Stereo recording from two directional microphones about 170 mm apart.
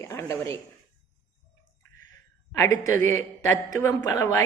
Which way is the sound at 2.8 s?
15° left (ahead or behind).